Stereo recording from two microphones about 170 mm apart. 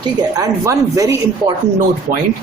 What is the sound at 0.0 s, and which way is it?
Speech, 20° right (ahead or behind).